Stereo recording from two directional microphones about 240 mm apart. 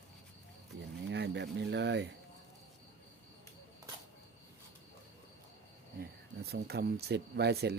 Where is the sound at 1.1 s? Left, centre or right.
Right.